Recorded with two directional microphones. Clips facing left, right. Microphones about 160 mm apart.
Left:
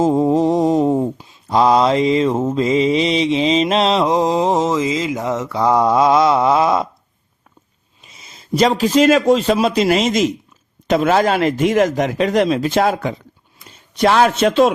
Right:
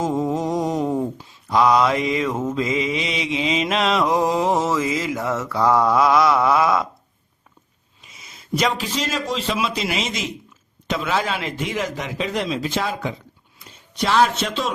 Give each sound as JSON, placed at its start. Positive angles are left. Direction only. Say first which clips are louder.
{"t": 0.0, "sound": "mantra", "louder": "left 8 dB", "side_deg": 30}
{"t": 8.2, "sound": "a sound", "louder": "left 6 dB", "side_deg": 30}
{"t": 9.0, "sound": "speech", "louder": "left 13 dB", "side_deg": 55}
{"t": 14.0, "sound": "a man's voice", "louder": "left 6 dB", "side_deg": 60}